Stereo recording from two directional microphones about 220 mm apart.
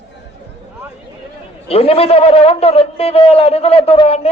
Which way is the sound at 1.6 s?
25° left (ahead or behind).